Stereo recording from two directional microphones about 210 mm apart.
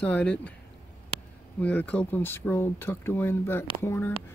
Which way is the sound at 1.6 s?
5° left (ahead or behind).